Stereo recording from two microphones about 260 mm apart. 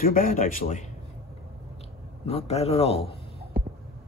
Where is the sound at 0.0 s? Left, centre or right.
Left.